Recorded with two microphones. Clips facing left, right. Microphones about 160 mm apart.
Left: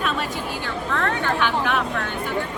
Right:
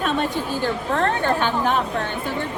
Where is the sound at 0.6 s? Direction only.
40° right (ahead or behind).